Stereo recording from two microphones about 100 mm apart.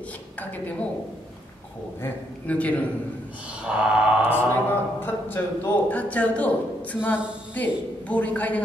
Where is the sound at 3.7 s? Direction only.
10° right (ahead or behind).